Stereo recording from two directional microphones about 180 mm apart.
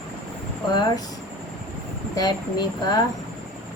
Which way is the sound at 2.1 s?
25° left (ahead or behind).